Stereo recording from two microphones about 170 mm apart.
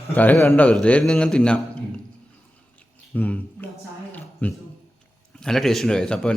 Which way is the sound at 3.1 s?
10° left (ahead or behind).